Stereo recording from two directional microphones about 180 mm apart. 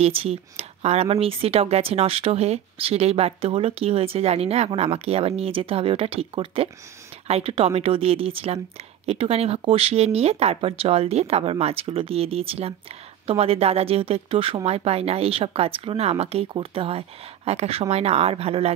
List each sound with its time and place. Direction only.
0.0 s speech: 35° right (ahead or behind)